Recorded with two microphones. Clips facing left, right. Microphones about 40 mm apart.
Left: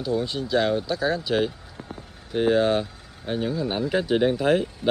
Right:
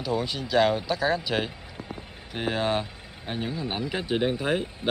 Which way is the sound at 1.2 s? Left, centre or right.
Centre.